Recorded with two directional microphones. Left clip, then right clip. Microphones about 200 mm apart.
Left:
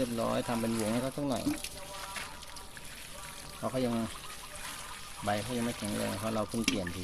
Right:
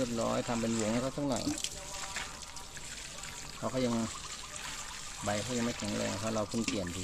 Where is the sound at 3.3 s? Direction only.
15° left (ahead or behind).